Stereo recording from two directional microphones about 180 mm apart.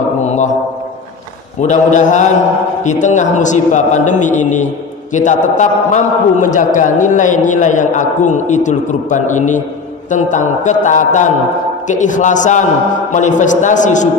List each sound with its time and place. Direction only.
0.3 s mantra: 40° left (ahead or behind)
1.6 s a man's voice: 40° left (ahead or behind)